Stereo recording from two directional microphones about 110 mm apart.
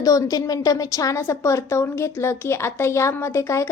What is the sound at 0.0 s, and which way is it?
A woman's voice, 35° left (ahead or behind).